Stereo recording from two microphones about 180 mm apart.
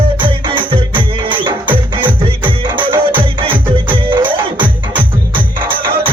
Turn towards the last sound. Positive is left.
turn(degrees=-10)  # may be behind; listen again after turning